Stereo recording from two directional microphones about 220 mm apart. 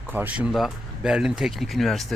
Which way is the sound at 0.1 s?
5° right (ahead or behind).